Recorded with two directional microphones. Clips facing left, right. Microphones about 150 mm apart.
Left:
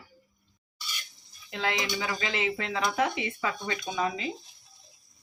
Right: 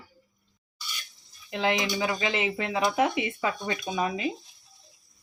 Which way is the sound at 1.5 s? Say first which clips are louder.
Right 4 dB; 20° right (ahead or behind).